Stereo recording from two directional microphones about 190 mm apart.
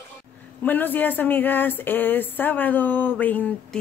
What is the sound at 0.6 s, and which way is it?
Speech, 10° left (ahead or behind).